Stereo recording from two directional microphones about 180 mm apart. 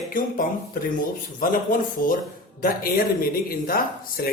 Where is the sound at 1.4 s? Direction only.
50° left (ahead or behind).